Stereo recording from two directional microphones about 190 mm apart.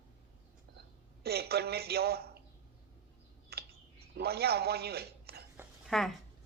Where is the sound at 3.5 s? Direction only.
55° right (ahead or behind).